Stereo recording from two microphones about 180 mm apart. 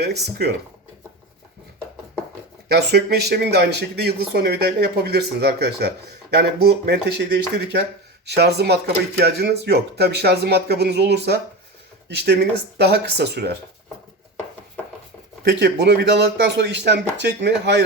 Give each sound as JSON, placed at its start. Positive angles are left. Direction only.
{"t": 0.0, "sound": "speech", "side_deg": -65}
{"t": 2.6, "sound": "speech", "side_deg": -65}
{"t": 15.4, "sound": "speech", "side_deg": -65}